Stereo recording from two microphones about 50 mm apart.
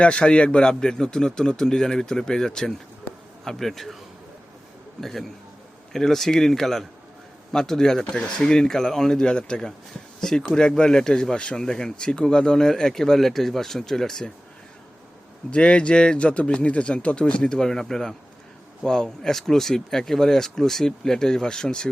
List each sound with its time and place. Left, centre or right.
0.0 s a man's voice: left; by 3.9 s centre
4.9 s a man's voice: centre
15.4 s speech: left